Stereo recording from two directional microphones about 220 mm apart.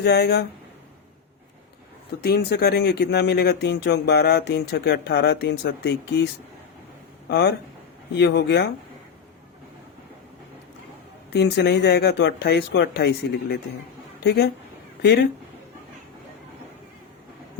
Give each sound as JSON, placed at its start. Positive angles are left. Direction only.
{"t": 0.0, "sound": "speech", "side_deg": 50}
{"t": 2.2, "sound": "speech", "side_deg": 45}
{"t": 11.3, "sound": "speech", "side_deg": 50}